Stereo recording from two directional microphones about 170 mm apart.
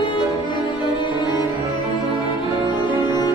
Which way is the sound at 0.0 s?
30° left (ahead or behind).